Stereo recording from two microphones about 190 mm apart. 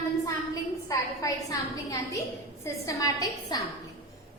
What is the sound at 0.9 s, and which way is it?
A woman's voice, 20° left (ahead or behind).